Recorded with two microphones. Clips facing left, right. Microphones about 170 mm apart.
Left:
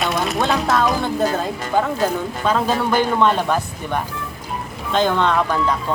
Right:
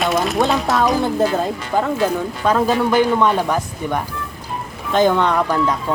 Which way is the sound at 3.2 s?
Centre (ahead or behind).